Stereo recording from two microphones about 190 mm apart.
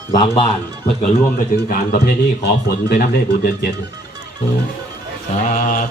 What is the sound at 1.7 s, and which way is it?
Speech, 60° left (ahead or behind).